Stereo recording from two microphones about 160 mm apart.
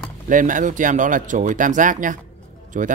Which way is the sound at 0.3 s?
55° right (ahead or behind).